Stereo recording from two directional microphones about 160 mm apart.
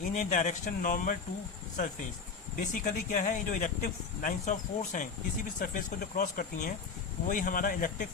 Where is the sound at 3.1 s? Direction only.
55° left (ahead or behind).